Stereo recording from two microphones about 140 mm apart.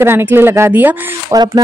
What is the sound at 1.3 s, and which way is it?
Speech, 30° right (ahead or behind).